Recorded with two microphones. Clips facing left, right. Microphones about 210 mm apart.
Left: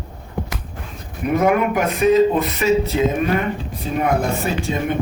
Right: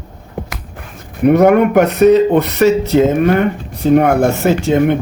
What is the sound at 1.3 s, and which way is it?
Speech, 70° right (ahead or behind).